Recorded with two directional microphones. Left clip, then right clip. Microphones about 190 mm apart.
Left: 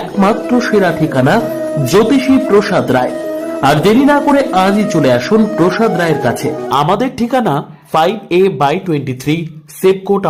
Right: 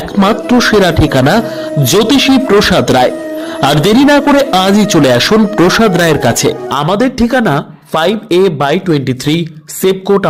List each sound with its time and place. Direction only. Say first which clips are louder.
0.2 s a man's voice: right 3 dB; 25° right (ahead or behind)
6.7 s speech: left 2 dB; 15° right (ahead or behind)